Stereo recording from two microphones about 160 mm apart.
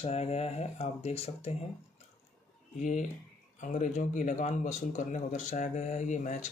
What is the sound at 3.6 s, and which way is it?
A man's voice, 50° left (ahead or behind).